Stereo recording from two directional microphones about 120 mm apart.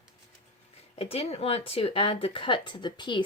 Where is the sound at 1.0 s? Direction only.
55° left (ahead or behind).